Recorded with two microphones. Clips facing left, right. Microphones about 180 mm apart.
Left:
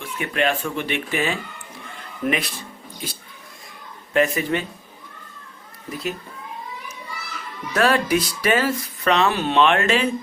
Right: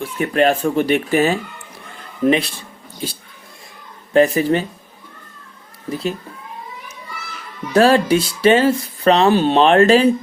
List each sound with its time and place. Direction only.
0.0 s speech: 35° right (ahead or behind)
4.1 s speech: 35° right (ahead or behind)
5.9 s speech: 30° right (ahead or behind)
7.7 s speech: 30° right (ahead or behind)